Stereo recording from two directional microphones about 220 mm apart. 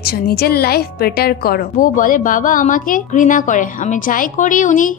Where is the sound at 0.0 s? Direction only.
45° left (ahead or behind).